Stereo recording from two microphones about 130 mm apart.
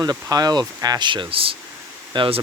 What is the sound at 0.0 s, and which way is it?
Speech, 30° right (ahead or behind).